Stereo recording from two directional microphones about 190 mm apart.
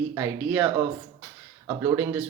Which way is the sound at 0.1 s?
10° right (ahead or behind).